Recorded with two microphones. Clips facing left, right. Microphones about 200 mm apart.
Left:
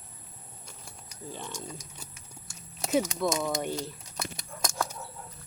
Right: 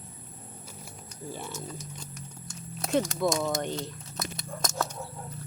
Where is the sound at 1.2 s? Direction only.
10° right (ahead or behind).